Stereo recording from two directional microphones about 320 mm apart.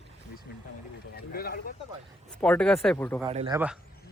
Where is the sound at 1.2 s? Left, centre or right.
Left.